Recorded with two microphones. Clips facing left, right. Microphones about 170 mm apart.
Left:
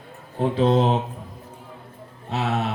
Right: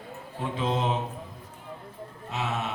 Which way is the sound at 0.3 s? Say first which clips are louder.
Left 10 dB; 35° left (ahead or behind).